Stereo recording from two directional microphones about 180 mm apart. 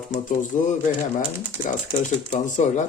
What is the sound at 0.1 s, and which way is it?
Speech, 45° left (ahead or behind).